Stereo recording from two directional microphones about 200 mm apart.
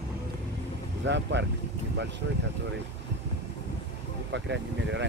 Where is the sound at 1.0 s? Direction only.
65° right (ahead or behind).